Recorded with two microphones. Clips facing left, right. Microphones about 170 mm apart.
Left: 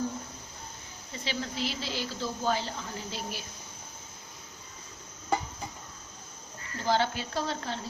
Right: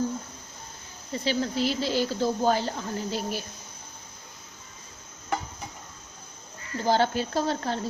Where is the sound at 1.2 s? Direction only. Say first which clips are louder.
Right 7 dB; 40° right (ahead or behind).